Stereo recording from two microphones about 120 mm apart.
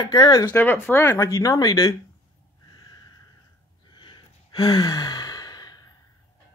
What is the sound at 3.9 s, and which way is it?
Sigh, 40° left (ahead or behind).